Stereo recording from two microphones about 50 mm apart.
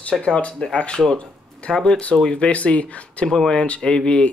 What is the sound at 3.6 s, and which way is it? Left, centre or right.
Speech, left.